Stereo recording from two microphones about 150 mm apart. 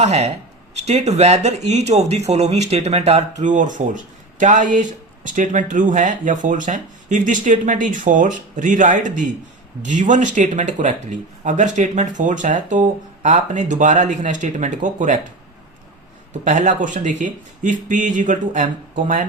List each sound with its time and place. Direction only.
0.0 s speech: 45° right (ahead or behind)
3.4 s speech: 55° right (ahead or behind)
16.4 s speech: 55° right (ahead or behind)